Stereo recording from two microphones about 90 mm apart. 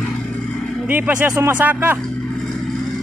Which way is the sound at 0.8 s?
20° right (ahead or behind).